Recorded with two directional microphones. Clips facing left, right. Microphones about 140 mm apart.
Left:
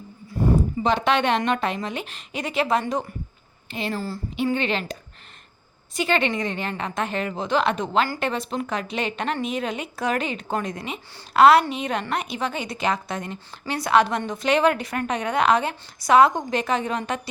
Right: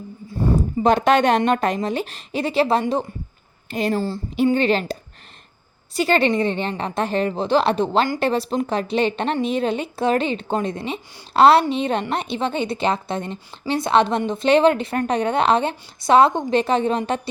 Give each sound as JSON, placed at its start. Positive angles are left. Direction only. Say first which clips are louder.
{"t": 0.8, "sound": "speech", "louder": "right 10 dB", "side_deg": -45}
{"t": 3.7, "sound": "a woman's voice", "louder": "right 6 dB", "side_deg": -40}